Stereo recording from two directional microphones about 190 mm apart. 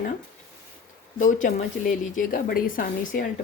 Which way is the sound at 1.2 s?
45° left (ahead or behind).